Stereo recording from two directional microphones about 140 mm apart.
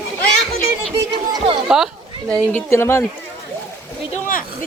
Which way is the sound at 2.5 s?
15° left (ahead or behind).